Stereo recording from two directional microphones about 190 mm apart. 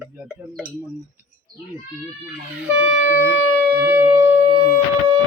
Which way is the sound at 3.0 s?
50° left (ahead or behind).